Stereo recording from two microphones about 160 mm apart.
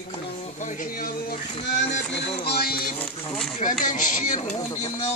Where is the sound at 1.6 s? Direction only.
90° left; by 2.9 s 70° left (ahead or behind).